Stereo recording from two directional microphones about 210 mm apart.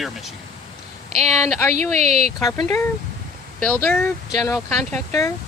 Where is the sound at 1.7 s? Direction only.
35° right (ahead or behind).